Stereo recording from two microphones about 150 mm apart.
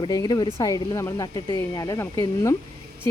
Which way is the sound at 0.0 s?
25° left (ahead or behind).